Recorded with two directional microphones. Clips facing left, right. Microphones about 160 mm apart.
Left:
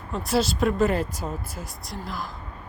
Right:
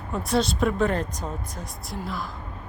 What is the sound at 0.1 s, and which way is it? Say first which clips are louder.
Speech: even; centre (ahead or behind).